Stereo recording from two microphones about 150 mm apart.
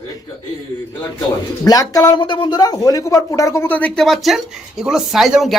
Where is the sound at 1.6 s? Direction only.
25° left (ahead or behind).